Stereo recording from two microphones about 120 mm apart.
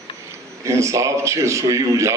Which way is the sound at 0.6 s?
25° right (ahead or behind).